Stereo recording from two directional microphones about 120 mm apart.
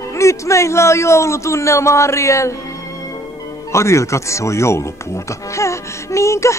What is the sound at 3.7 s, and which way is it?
Speech, 25° left (ahead or behind).